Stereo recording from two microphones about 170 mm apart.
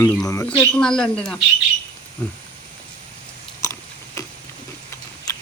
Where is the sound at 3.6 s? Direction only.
15° left (ahead or behind).